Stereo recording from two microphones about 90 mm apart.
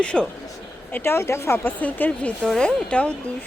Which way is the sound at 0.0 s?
10° left (ahead or behind).